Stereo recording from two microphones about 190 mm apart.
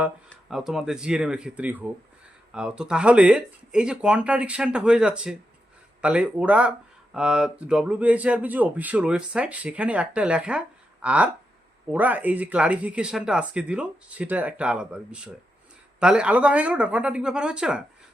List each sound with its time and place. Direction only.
0.3 s speech: centre (ahead or behind)